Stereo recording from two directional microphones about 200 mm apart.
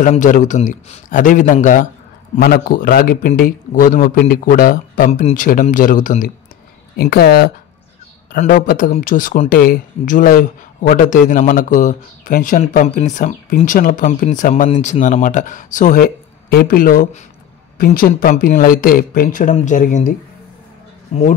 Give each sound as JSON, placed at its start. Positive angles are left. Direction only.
{"t": 0.0, "sound": "a man's voice", "side_deg": 40}